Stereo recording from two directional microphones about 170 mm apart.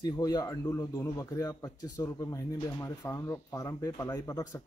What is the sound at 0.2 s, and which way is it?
A man's voice, 20° left (ahead or behind).